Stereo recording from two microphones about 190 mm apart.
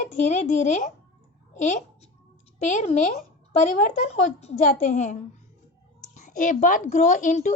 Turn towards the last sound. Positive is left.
turn(degrees=40)  # may be behind; listen again after turning